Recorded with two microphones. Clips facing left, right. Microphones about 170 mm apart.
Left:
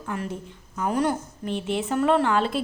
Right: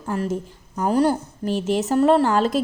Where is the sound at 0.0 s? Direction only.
35° right (ahead or behind).